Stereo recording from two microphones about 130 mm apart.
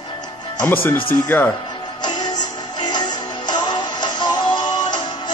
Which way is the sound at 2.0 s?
35° left (ahead or behind).